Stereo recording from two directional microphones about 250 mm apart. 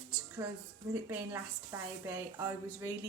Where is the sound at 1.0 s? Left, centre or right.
Centre.